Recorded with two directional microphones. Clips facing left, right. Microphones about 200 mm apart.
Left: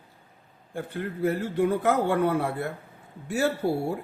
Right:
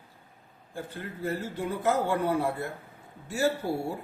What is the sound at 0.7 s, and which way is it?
A man's voice, 60° left (ahead or behind).